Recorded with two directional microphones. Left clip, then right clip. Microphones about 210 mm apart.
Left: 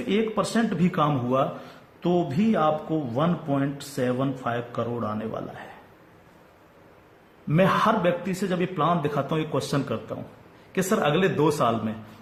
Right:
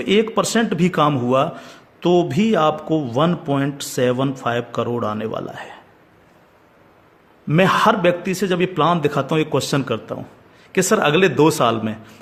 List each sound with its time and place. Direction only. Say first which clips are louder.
0.1 s speech: right 8 dB; 50° right (ahead or behind)
7.4 s speech: right 6 dB; 45° right (ahead or behind)